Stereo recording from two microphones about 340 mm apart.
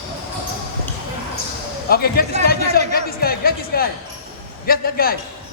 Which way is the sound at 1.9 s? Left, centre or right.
Left.